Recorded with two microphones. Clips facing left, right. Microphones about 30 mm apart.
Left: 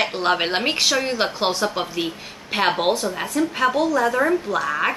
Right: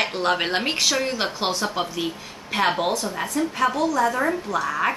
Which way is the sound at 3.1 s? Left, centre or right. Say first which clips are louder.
Left 2 dB; centre.